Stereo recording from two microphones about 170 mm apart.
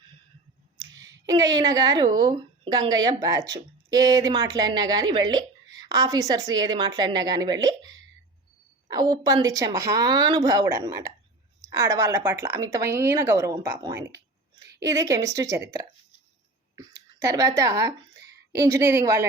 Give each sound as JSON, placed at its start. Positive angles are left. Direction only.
{"t": 1.3, "sound": "a woman's voice", "side_deg": -20}